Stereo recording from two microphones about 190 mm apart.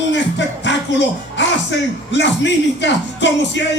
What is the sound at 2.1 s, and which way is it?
Speech, 70° left (ahead or behind).